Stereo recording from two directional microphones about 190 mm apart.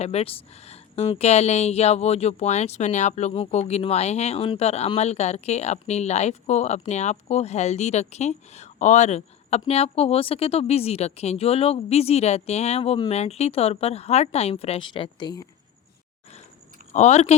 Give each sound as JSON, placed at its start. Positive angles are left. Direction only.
{"t": 0.0, "sound": "speech", "side_deg": 35}
{"t": 16.9, "sound": "speech", "side_deg": 35}